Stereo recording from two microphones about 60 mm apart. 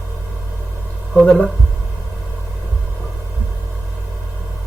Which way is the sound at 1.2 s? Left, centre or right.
Centre.